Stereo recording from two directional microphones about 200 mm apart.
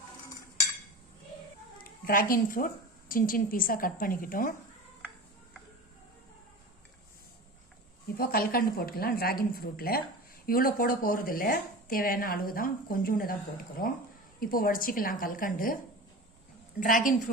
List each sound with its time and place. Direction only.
1.8 s a woman's voice: 45° left (ahead or behind)
8.2 s speech: 45° left (ahead or behind)
16.8 s speech: 40° left (ahead or behind)